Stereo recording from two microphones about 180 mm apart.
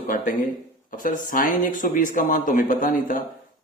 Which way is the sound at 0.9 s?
50° left (ahead or behind).